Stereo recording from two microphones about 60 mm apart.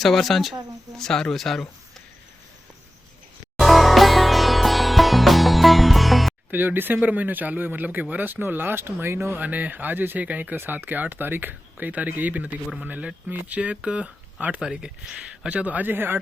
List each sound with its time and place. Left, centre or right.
0.0 s speech: centre
3.6 s music: centre
6.5 s speech: right
9.4 s speech: right
13.6 s speech: centre
14.6 s speech: centre; by 16.1 s right